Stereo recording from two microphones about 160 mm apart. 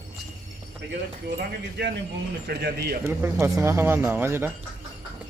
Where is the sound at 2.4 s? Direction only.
85° right.